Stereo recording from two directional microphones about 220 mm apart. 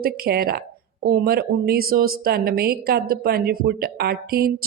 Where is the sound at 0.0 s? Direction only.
45° right (ahead or behind).